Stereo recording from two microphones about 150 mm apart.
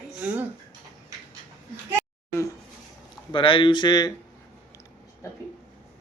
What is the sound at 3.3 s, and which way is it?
Speech, 35° left (ahead or behind).